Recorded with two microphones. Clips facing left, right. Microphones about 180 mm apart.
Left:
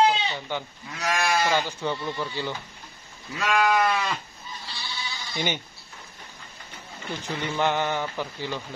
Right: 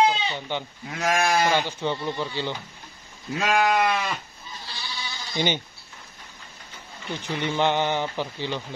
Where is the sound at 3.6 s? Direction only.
20° right (ahead or behind).